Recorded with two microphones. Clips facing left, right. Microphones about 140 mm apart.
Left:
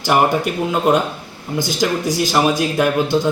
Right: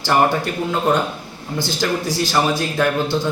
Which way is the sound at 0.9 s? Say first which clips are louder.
Left 3 dB; 20° left (ahead or behind).